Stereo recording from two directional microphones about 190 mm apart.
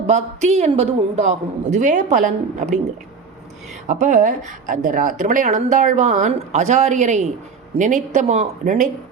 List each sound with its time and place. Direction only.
0.1 s a woman's voice: 35° right (ahead or behind)
3.8 s a woman's voice: 40° right (ahead or behind)